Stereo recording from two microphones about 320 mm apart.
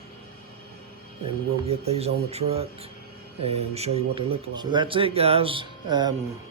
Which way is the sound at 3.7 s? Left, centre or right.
Centre.